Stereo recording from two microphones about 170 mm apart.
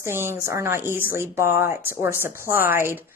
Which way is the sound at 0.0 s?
15° right (ahead or behind).